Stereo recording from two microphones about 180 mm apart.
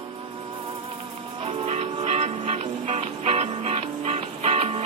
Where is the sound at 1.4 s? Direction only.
35° right (ahead or behind).